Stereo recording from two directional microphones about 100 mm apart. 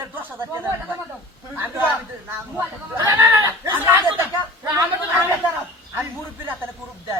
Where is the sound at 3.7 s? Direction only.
25° right (ahead or behind).